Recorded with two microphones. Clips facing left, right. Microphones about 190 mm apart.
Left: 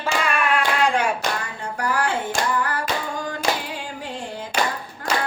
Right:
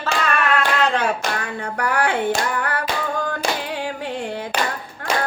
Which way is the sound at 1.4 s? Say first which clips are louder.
Right 3 dB; 60° right (ahead or behind).